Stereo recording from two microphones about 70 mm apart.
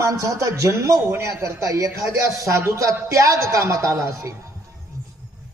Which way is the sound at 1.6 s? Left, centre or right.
Right.